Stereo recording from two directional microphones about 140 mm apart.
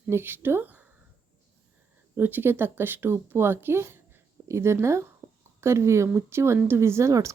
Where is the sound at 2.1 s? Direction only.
15° right (ahead or behind).